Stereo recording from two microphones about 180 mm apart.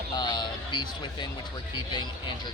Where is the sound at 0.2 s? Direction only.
25° left (ahead or behind).